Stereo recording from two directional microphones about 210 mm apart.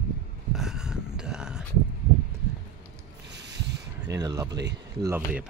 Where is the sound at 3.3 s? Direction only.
55° right (ahead or behind).